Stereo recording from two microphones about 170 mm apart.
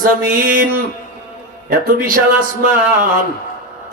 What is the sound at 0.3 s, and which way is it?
Speech, 55° right (ahead or behind).